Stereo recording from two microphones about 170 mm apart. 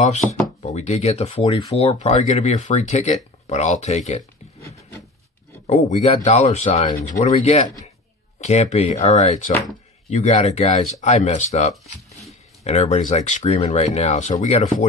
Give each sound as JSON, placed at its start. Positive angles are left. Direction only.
{"t": 0.0, "sound": "speech", "side_deg": 45}
{"t": 6.2, "sound": "speech", "side_deg": 40}